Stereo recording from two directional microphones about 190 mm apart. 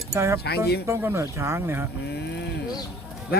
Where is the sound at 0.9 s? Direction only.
15° right (ahead or behind).